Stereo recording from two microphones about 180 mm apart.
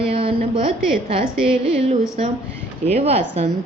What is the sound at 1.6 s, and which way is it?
A woman's voice, 40° right (ahead or behind).